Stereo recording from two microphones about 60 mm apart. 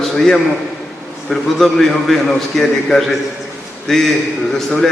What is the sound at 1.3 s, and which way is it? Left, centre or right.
A man's voice, centre.